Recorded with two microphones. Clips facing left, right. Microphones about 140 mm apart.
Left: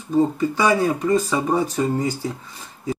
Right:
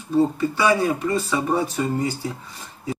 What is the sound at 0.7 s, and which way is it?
Speech, 5° right (ahead or behind).